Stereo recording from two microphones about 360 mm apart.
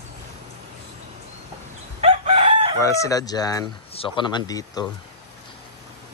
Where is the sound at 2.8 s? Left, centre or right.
Centre.